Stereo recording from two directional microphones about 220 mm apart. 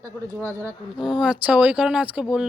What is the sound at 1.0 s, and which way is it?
Speech, 20° left (ahead or behind).